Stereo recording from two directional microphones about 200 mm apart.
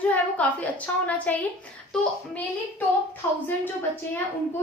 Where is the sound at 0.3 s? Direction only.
5° left (ahead or behind).